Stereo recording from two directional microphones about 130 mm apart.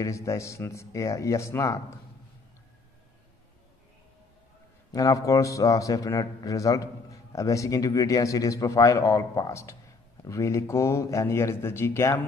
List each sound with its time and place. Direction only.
0.0 s a man's voice: 25° left (ahead or behind)
4.9 s a man's voice: 25° left (ahead or behind)